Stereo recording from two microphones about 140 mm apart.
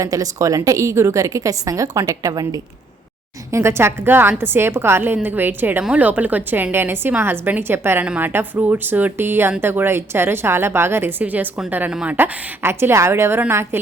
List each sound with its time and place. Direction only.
0.0 s a woman's voice: 25° right (ahead or behind)